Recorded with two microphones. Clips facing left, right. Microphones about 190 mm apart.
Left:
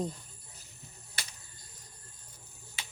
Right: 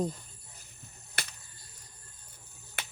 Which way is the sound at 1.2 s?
60° right (ahead or behind).